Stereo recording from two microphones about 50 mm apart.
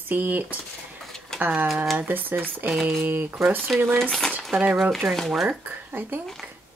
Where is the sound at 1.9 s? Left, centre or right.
Right.